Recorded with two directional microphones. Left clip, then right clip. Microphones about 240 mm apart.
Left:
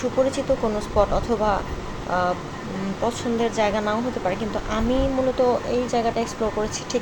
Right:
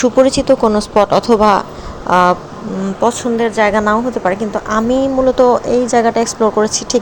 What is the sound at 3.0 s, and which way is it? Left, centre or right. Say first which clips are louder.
A woman's voice: right 10 dB; right.